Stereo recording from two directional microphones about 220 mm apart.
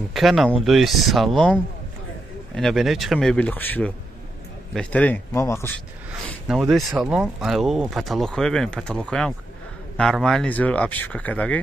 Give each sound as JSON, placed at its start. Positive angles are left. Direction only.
{"t": 0.1, "sound": "speech", "side_deg": 0}
{"t": 6.4, "sound": "speech", "side_deg": 0}